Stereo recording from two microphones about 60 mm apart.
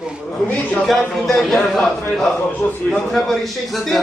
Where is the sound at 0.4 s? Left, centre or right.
Left.